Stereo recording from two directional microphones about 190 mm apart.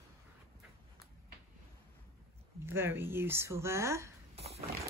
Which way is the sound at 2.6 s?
10° right (ahead or behind).